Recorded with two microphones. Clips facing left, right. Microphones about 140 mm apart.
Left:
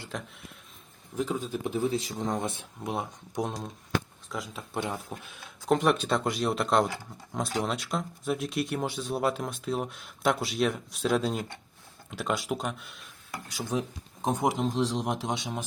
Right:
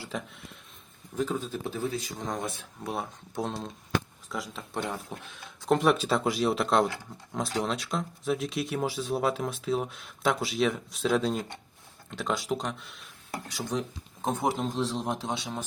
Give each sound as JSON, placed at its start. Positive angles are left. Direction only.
{"t": 0.1, "sound": "speech", "side_deg": -5}
{"t": 1.1, "sound": "speech", "side_deg": 10}
{"t": 4.3, "sound": "speech", "side_deg": 0}
{"t": 14.3, "sound": "speech", "side_deg": 15}